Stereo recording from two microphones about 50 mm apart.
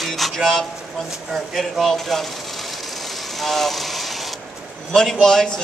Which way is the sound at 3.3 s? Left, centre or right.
Centre.